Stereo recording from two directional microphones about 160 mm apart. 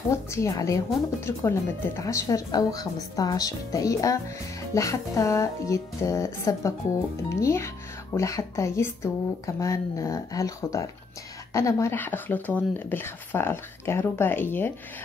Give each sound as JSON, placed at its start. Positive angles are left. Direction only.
{"t": 0.1, "sound": "speech", "side_deg": 20}